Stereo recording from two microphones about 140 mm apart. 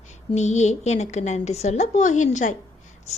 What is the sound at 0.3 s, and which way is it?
A woman's voice, 55° left (ahead or behind).